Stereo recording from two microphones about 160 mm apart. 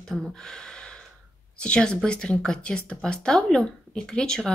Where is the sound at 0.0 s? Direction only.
Centre (ahead or behind).